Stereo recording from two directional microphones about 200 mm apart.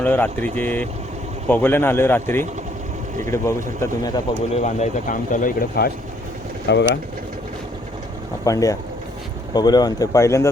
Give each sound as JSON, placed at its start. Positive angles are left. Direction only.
{"t": 0.0, "sound": "speech", "side_deg": 10}
{"t": 4.5, "sound": "speech", "side_deg": 35}
{"t": 8.4, "sound": "speech", "side_deg": 15}